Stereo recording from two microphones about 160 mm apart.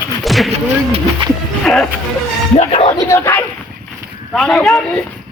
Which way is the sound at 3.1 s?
15° left (ahead or behind).